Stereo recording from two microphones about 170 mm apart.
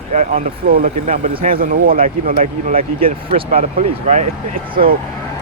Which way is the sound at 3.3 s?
35° right (ahead or behind).